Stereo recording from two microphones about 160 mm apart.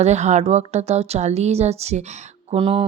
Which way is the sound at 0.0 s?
45° right (ahead or behind).